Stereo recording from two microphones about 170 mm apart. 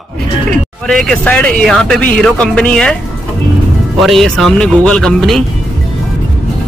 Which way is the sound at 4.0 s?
Centre (ahead or behind).